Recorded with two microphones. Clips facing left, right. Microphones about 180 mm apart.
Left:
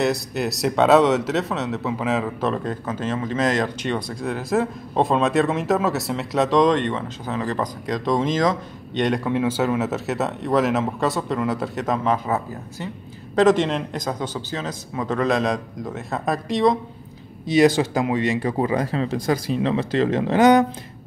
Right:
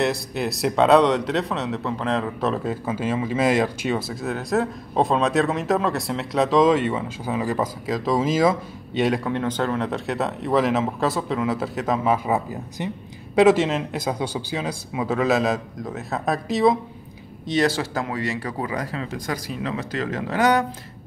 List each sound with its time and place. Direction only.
0.0 s speech: centre (ahead or behind)
17.5 s speech: 15° left (ahead or behind)